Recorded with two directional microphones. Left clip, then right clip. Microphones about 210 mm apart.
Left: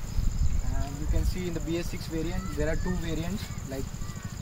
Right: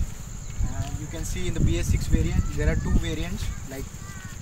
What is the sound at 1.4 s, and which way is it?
Speech, 10° left (ahead or behind).